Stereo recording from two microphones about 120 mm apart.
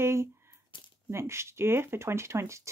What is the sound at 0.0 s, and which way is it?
Speech, 20° right (ahead or behind).